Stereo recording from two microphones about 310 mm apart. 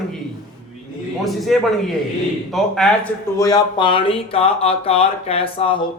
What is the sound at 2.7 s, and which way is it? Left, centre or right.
Speech, centre.